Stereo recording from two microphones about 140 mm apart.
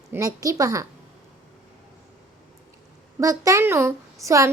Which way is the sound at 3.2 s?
25° right (ahead or behind).